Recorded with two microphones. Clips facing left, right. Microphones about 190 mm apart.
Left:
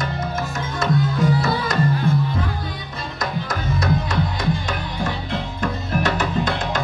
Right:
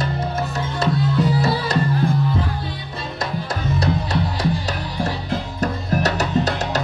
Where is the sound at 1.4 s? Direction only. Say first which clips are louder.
Right 2 dB; 35° right (ahead or behind).